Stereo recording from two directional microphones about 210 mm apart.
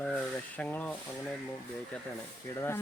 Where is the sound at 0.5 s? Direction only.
5° left (ahead or behind).